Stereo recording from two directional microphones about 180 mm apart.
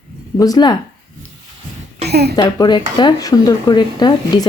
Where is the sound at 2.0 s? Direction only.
65° right (ahead or behind).